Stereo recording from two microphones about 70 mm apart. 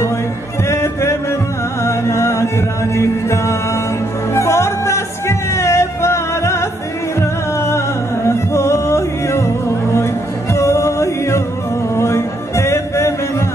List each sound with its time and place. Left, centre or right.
0.7 s music: left
10.5 s music: left